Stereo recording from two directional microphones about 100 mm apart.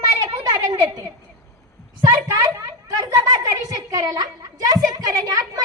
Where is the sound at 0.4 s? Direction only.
35° right (ahead or behind).